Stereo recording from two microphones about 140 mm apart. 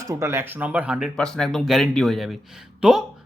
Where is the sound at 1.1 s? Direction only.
5° left (ahead or behind).